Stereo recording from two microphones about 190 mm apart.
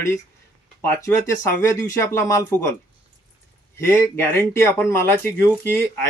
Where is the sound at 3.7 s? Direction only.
15° left (ahead or behind).